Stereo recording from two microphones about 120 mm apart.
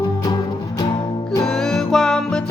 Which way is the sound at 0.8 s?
40° left (ahead or behind).